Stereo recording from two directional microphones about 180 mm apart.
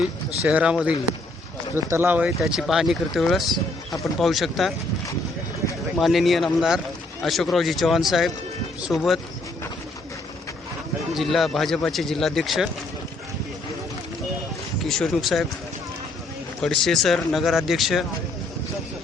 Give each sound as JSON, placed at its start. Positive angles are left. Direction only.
{"t": 0.4, "sound": "a man's voice", "side_deg": -5}
{"t": 3.5, "sound": "speech", "side_deg": 20}
{"t": 4.2, "sound": "a man's voice", "side_deg": 0}
{"t": 6.0, "sound": "a man's voice", "side_deg": 0}
{"t": 11.1, "sound": "a man's voice", "side_deg": 0}
{"t": 14.8, "sound": "speech", "side_deg": 0}
{"t": 16.6, "sound": "a man's voice", "side_deg": 0}